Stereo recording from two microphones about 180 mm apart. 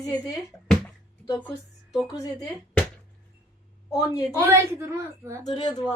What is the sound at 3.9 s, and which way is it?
Speech, 20° left (ahead or behind).